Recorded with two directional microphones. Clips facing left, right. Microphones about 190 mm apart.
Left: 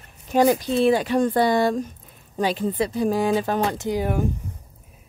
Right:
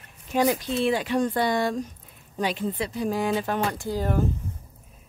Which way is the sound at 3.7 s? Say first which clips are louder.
Left 3 dB; 20° left (ahead or behind).